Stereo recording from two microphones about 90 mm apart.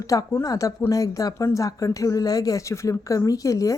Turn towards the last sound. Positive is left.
turn(degrees=40)  # may be behind; listen again after turning